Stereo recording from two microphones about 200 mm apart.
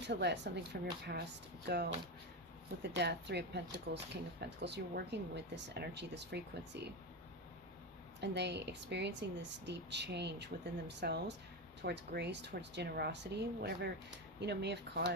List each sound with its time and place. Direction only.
0.0 s speech: 60° right (ahead or behind)
8.2 s speech: 60° right (ahead or behind)